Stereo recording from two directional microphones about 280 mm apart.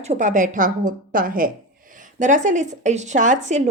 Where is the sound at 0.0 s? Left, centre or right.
Right.